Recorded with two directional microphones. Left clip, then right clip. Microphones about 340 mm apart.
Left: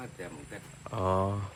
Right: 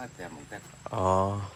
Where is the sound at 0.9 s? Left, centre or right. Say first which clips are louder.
Right 4 dB; centre.